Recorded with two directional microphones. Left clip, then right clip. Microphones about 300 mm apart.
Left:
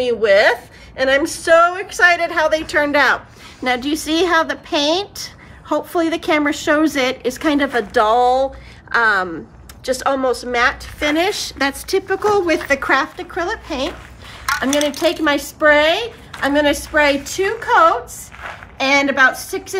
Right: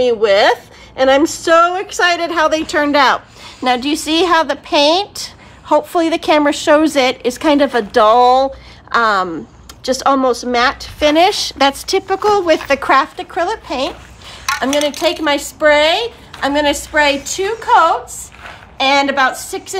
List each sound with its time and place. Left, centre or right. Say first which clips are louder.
0.0 s a woman's voice: right 2 dB; right